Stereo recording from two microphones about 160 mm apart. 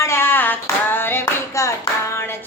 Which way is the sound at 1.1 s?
20° left (ahead or behind).